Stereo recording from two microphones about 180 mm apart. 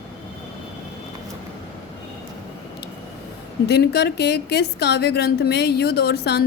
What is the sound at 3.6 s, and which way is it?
A woman's voice, 65° left (ahead or behind).